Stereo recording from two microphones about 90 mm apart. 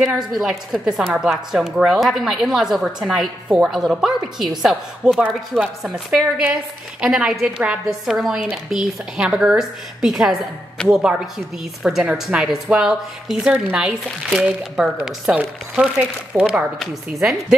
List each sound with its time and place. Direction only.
0.0 s speech: 5° right (ahead or behind)
16.8 s speech: 5° right (ahead or behind)